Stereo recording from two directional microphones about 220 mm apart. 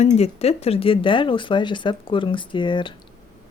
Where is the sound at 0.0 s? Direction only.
30° left (ahead or behind).